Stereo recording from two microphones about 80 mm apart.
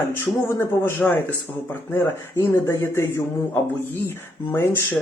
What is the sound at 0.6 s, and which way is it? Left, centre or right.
Speech, left.